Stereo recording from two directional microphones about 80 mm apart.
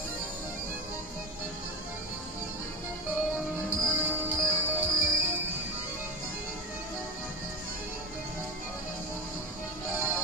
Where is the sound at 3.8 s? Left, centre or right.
Right.